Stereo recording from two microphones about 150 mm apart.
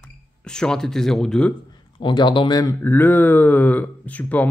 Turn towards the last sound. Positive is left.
turn(degrees=10)  # may be behind; listen again after turning